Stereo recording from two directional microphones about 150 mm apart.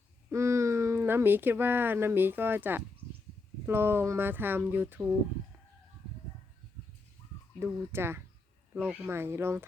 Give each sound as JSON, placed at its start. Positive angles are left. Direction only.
{"t": 0.3, "sound": "speech", "side_deg": -20}
{"t": 7.6, "sound": "speech", "side_deg": -15}